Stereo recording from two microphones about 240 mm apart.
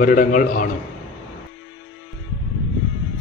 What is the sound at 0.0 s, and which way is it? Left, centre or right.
Speech, left.